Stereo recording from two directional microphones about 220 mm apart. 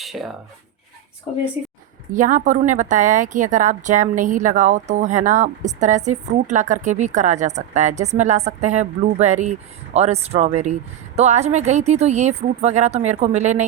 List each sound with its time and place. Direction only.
0.0 s dishes: centre (ahead or behind)
1.3 s speech: 30° left (ahead or behind)
2.1 s a woman's voice: 35° right (ahead or behind)